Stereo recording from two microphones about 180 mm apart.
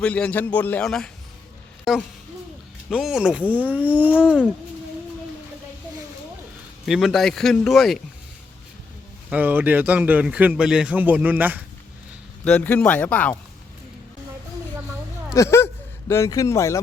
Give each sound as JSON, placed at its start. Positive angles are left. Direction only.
{"t": 0.0, "sound": "a man's voice", "side_deg": 10}
{"t": 6.8, "sound": "a man's voice", "side_deg": 0}
{"t": 9.3, "sound": "a man's voice", "side_deg": -10}
{"t": 12.5, "sound": "a man's voice", "side_deg": 10}
{"t": 15.4, "sound": "speech", "side_deg": 15}